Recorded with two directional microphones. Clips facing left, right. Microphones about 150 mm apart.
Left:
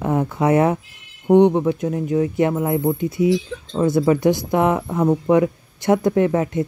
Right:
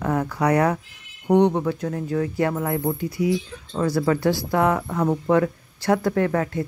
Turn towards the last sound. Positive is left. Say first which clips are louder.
# left 4 dB
turn(degrees=20)  # may be behind; listen again after turning